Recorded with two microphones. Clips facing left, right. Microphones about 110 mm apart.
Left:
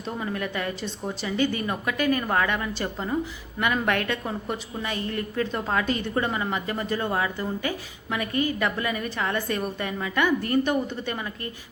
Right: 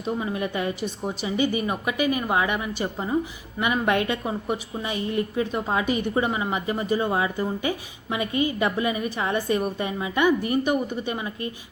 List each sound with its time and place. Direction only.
0.2 s a woman's voice: 20° right (ahead or behind)